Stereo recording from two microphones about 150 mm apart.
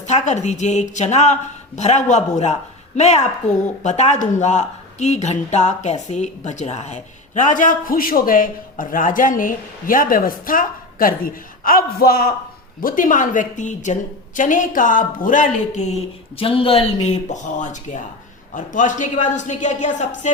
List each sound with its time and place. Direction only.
0.0 s a woman's voice: 50° left (ahead or behind); by 12.3 s 80° left
12.8 s speech: 60° left (ahead or behind)